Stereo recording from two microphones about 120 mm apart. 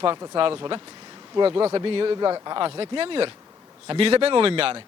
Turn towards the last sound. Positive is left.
turn(degrees=-50)  # may be behind; listen again after turning